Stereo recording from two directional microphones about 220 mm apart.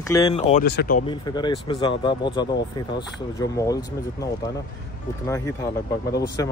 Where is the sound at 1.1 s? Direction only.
20° left (ahead or behind).